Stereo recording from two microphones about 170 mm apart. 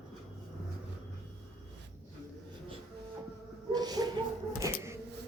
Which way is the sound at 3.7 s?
25° right (ahead or behind).